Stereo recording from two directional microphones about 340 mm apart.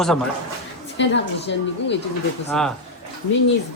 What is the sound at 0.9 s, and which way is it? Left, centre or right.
A woman's voice, left.